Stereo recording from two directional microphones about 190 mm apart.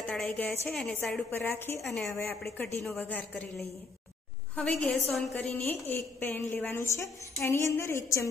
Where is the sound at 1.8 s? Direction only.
Centre (ahead or behind).